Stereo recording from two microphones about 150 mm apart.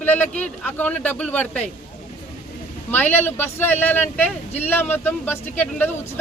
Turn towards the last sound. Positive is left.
turn(degrees=10)  # may be behind; listen again after turning